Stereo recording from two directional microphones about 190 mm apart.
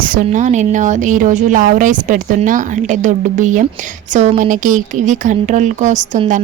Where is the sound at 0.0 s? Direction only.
45° right (ahead or behind).